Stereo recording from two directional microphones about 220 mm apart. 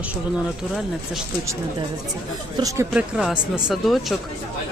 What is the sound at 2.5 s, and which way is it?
Speech, 15° right (ahead or behind).